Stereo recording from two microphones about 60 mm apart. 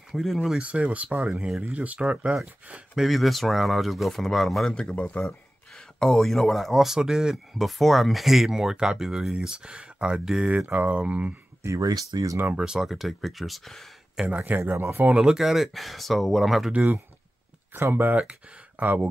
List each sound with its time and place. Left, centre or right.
0.1 s speech: centre
0.6 s speech: right
3.0 s speech: centre
4.7 s speech: centre
10.7 s speech: right
11.6 s speech: right
12.5 s speech: centre
14.2 s speech: right
14.6 s speech: right
15.1 s speech: centre
16.7 s speech: right
17.7 s speech: right